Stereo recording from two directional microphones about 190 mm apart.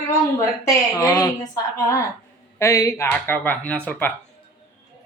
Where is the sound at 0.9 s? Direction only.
20° left (ahead or behind).